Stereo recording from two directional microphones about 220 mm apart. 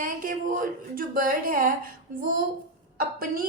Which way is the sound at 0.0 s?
40° right (ahead or behind).